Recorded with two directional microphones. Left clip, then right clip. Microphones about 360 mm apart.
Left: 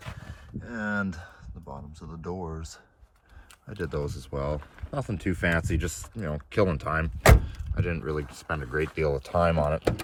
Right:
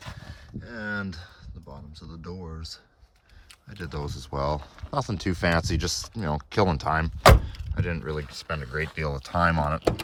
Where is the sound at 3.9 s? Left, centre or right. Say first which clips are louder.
Right 1 dB; centre.